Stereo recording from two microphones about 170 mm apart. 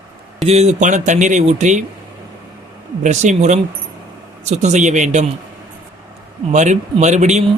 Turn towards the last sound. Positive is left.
turn(degrees=-45)  # may be behind; listen again after turning